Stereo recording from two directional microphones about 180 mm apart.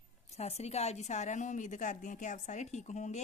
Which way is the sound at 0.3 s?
35° left (ahead or behind).